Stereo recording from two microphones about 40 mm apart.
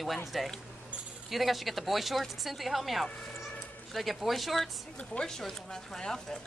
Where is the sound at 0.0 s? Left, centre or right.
Centre.